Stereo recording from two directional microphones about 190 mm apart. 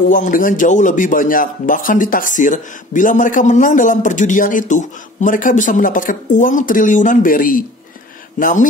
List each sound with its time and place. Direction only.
0.1 s speech: 45° left (ahead or behind)